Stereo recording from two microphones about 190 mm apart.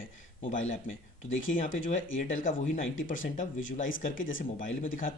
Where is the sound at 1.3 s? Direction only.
90° left.